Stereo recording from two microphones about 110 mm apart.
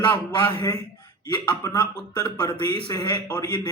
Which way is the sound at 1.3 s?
40° left (ahead or behind).